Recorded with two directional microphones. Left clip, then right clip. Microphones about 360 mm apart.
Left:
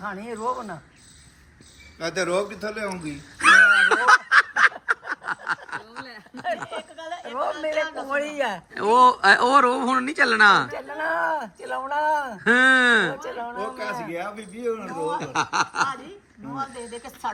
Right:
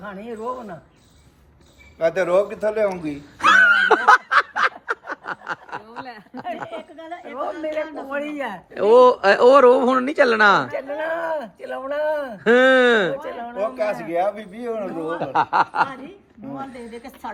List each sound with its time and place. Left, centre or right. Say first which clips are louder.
0.0 s speech: left 1 dB; centre
2.0 s a man's voice: right 7 dB; right
3.4 s snicker: even; centre
6.9 s a woman's voice: left 1 dB; centre
8.7 s speech: right 4 dB; centre
14.1 s a man's voice: right 9 dB; right
14.8 s speech: right 2 dB; centre